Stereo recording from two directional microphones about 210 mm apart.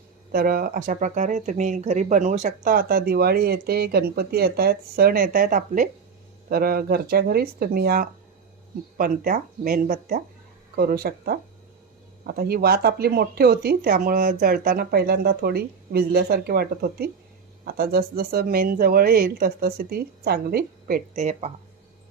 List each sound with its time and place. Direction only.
0.3 s speech: 45° right (ahead or behind)